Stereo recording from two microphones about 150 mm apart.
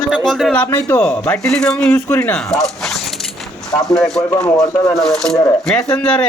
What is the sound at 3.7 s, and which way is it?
Speech, centre (ahead or behind).